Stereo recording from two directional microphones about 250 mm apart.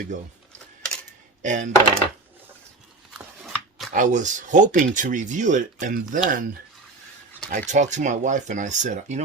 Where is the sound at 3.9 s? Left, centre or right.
Right.